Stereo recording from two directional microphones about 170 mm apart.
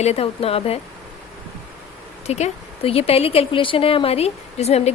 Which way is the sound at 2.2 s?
40° left (ahead or behind).